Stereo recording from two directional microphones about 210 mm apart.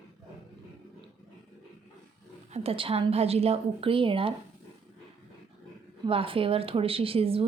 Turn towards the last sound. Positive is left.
turn(degrees=-25)  # may be behind; listen again after turning